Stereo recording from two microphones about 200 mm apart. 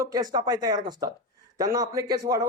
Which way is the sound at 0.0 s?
20° right (ahead or behind).